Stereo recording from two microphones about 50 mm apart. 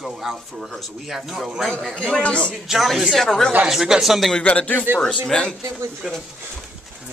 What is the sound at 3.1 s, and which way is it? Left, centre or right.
Speech, centre.